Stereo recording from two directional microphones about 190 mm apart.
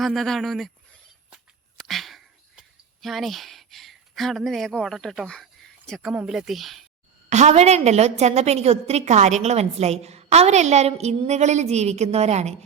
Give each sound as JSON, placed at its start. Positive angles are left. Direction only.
{"t": 0.0, "sound": "speech", "side_deg": 0}
{"t": 1.9, "sound": "a sound", "side_deg": 0}
{"t": 7.3, "sound": "a woman's voice", "side_deg": -35}